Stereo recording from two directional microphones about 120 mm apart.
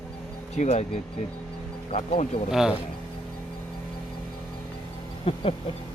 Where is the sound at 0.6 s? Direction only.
75° left (ahead or behind).